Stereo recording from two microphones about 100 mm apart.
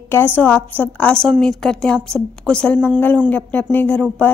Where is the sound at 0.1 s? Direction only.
20° left (ahead or behind).